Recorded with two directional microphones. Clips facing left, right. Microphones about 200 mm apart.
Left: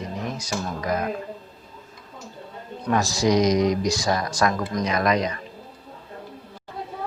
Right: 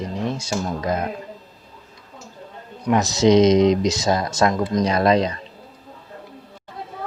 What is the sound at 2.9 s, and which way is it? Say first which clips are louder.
Speech: right 5 dB; 20° right (ahead or behind).